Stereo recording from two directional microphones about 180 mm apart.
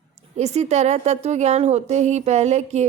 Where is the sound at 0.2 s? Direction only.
40° right (ahead or behind).